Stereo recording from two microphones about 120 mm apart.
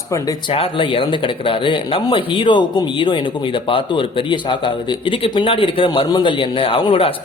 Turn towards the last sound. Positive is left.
turn(degrees=45)  # may be behind; listen again after turning